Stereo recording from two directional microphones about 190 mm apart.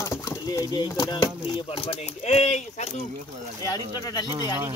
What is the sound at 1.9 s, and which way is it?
Speech, 35° left (ahead or behind).